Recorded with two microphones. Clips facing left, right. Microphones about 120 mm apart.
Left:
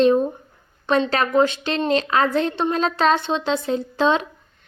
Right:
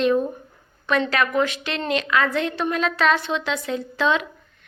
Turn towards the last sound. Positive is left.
turn(degrees=35)  # may be behind; listen again after turning